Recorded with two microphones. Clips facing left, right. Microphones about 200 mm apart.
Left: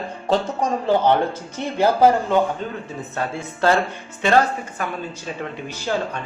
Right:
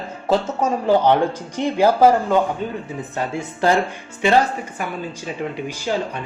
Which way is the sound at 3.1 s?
15° right (ahead or behind).